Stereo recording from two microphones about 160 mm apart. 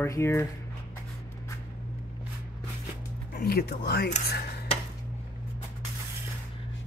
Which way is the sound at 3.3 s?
75° left (ahead or behind).